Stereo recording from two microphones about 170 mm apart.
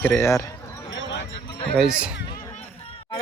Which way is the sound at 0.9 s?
90° left.